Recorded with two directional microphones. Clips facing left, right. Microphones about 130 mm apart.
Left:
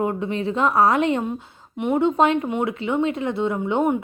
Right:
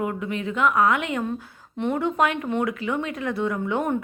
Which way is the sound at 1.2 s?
20° left (ahead or behind).